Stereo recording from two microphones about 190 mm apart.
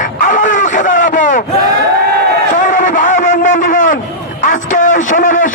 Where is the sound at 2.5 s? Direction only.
45° left (ahead or behind).